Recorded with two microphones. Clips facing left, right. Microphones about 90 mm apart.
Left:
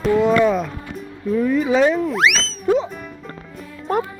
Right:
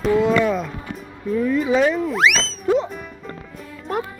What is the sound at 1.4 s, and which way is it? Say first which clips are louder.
Speech: left 1 dB; 10° left (ahead or behind).